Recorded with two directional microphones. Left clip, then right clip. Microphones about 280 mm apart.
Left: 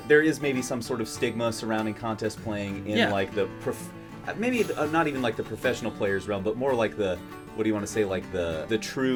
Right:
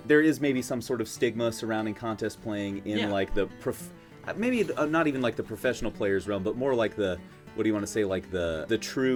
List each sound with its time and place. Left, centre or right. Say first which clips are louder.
0.1 s speech: left 1 dB; right